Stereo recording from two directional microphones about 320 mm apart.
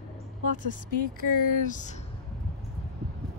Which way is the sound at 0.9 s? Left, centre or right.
Left.